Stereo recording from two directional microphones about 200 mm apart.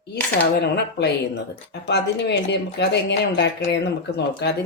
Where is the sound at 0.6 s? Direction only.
55° left (ahead or behind).